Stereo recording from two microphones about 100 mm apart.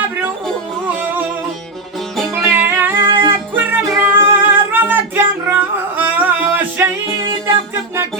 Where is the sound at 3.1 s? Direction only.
55° right (ahead or behind).